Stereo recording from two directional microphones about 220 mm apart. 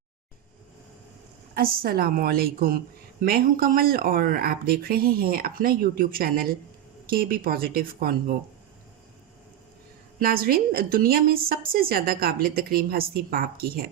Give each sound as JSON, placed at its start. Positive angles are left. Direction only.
{"t": 1.5, "sound": "a woman's voice", "side_deg": -40}
{"t": 10.2, "sound": "a woman's voice", "side_deg": -40}